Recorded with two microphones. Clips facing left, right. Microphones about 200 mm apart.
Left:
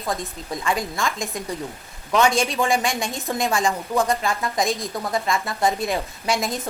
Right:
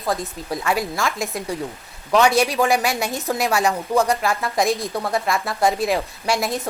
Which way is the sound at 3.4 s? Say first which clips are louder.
Right 1 dB; 70° right (ahead or behind).